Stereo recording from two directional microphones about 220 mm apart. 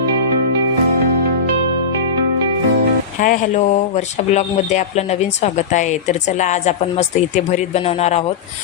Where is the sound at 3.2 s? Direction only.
35° left (ahead or behind).